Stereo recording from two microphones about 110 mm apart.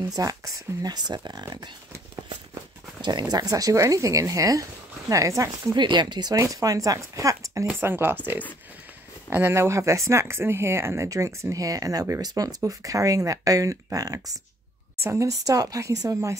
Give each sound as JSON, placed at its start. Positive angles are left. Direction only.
{"t": 0.0, "sound": "speech", "side_deg": -30}
{"t": 3.0, "sound": "speech", "side_deg": -40}
{"t": 5.8, "sound": "speech", "side_deg": -45}
{"t": 7.6, "sound": "speech", "side_deg": -20}
{"t": 9.3, "sound": "speech", "side_deg": -25}